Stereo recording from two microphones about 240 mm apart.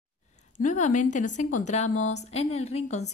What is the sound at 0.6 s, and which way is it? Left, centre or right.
A woman's voice, left.